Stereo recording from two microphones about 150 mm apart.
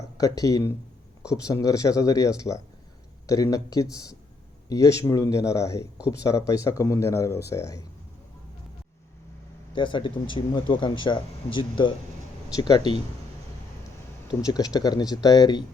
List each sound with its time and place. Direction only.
0.2 s speech: 25° left (ahead or behind)
9.7 s speech: 35° left (ahead or behind)
14.3 s speech: 25° left (ahead or behind)